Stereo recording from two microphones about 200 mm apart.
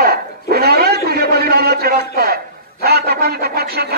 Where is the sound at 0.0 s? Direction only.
50° right (ahead or behind).